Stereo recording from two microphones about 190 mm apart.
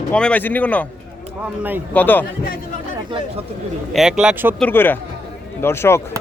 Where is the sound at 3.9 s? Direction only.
Centre (ahead or behind).